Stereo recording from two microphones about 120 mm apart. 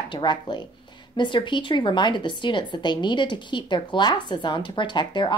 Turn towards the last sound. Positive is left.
turn(degrees=40)  # may be behind; listen again after turning